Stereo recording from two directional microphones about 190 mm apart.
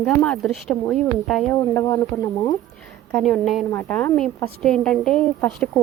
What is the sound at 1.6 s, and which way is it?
Speech, 15° left (ahead or behind).